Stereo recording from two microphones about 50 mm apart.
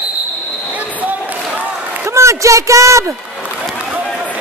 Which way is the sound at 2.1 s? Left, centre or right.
Right.